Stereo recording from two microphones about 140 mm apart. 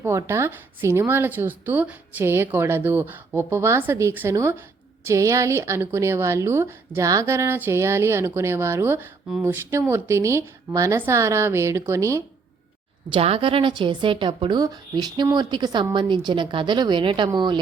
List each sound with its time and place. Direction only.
0.0 s a woman's voice: 20° right (ahead or behind)
13.1 s a woman's voice: 45° right (ahead or behind)